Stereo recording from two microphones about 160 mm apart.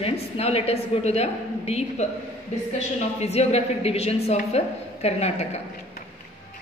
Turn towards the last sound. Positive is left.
turn(degrees=40)  # may be behind; listen again after turning